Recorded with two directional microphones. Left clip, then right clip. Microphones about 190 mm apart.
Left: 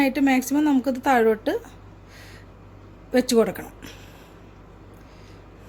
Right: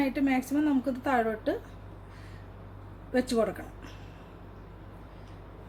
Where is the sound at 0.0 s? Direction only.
45° left (ahead or behind).